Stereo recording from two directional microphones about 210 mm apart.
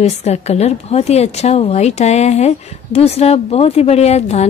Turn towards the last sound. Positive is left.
turn(degrees=30)  # may be behind; listen again after turning